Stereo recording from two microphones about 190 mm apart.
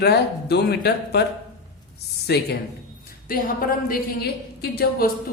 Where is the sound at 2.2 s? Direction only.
60° left (ahead or behind).